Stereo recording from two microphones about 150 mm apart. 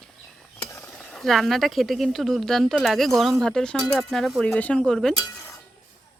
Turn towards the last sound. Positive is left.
turn(degrees=5)  # may be behind; listen again after turning